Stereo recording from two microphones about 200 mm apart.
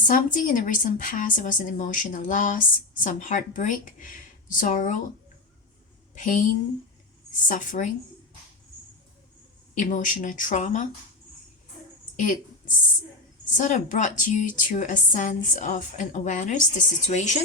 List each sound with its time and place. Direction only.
0.0 s a woman's voice: 40° left (ahead or behind)
6.1 s a woman's voice: 40° left (ahead or behind)
7.4 s a woman's voice: 40° left (ahead or behind)
9.7 s a woman's voice: 40° left (ahead or behind)
12.1 s a sound: 40° left (ahead or behind)
13.6 s a woman's voice: 40° left (ahead or behind)